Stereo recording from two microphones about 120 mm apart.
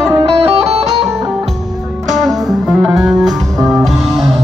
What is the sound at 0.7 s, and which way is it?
Music, 60° right (ahead or behind).